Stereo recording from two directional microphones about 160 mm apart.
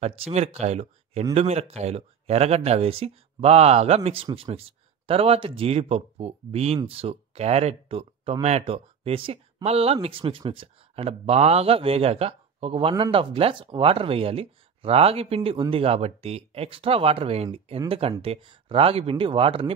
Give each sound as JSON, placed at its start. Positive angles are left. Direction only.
{"t": 0.0, "sound": "speech", "side_deg": -40}